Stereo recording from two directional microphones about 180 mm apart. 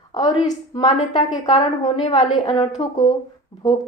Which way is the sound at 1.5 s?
35° left (ahead or behind).